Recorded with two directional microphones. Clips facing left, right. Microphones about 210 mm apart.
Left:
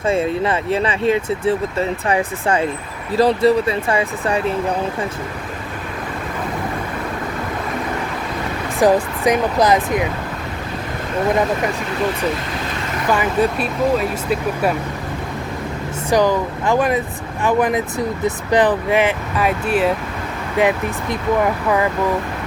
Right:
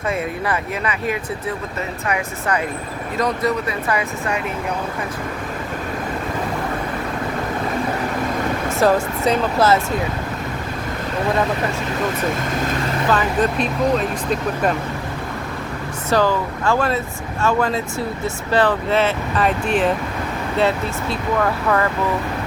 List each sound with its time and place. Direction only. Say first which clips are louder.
0.1 s speech: left 5 dB; 25° left (ahead or behind)
8.8 s speech: left 3 dB; 15° left (ahead or behind)
13.1 s speech: left 3 dB; 10° left (ahead or behind)
16.0 s speech: left 2 dB; 15° left (ahead or behind)